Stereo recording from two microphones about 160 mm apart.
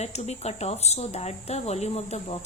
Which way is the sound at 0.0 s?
45° left (ahead or behind).